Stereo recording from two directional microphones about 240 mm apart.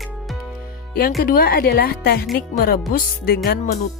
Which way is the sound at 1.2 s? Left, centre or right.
Left.